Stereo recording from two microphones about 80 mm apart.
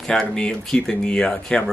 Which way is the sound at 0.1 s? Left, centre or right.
Centre.